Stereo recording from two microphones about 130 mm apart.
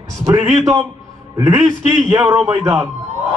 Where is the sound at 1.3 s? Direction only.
25° right (ahead or behind).